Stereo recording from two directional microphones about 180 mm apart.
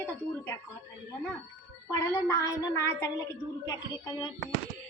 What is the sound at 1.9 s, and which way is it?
A woman's voice, 15° left (ahead or behind).